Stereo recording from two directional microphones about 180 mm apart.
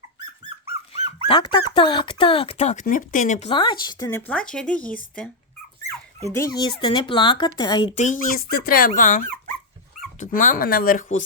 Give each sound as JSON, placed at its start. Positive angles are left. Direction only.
{"t": 1.3, "sound": "speech", "side_deg": 25}
{"t": 2.8, "sound": "speech", "side_deg": 45}
{"t": 3.5, "sound": "speech", "side_deg": 25}
{"t": 4.3, "sound": "speech", "side_deg": 5}
{"t": 6.2, "sound": "speech", "side_deg": 20}
{"t": 7.9, "sound": "speech", "side_deg": 50}